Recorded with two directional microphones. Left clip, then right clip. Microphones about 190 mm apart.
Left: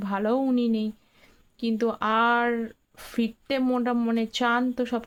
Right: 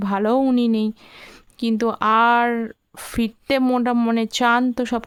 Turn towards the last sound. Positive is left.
turn(degrees=-40)  # may be behind; listen again after turning